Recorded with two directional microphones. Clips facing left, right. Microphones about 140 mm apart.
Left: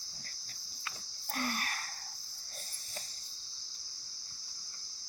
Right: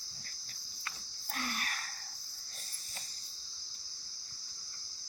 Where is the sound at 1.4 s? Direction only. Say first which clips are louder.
Left 3 dB; 45° left (ahead or behind).